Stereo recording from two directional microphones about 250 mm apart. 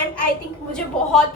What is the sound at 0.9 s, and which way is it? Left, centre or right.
Speech, centre.